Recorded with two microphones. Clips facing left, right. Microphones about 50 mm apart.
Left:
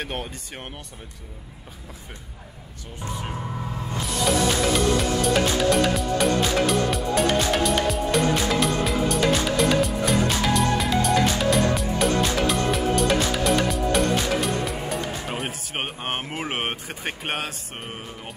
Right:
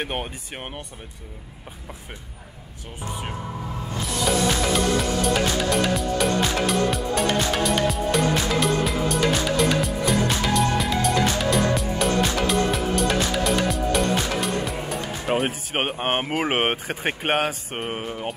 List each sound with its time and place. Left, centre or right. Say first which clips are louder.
4.7 s music: even; centre
15.3 s music: right 13 dB; centre
16.0 s speech: right 6 dB; right